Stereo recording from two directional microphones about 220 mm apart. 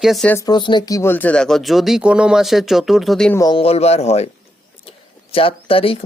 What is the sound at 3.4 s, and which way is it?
Speech, 25° left (ahead or behind).